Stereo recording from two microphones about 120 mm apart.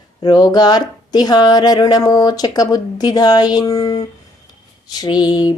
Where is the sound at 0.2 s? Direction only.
35° left (ahead or behind).